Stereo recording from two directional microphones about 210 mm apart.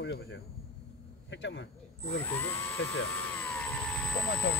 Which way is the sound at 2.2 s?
10° left (ahead or behind).